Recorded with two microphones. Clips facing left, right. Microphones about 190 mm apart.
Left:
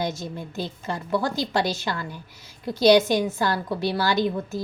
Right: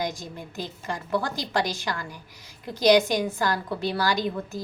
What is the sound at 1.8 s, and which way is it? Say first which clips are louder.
Speech: left 2 dB; 20° left (ahead or behind).